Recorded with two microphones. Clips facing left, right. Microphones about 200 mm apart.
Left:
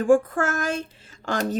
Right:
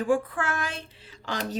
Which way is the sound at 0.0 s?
45° left (ahead or behind).